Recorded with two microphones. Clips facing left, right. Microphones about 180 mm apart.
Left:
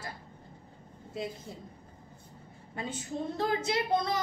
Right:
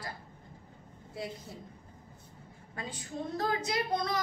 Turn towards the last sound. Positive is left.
turn(degrees=25)  # may be behind; listen again after turning